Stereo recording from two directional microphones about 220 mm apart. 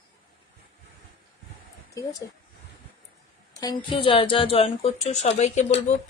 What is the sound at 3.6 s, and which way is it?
A woman's voice, 25° left (ahead or behind).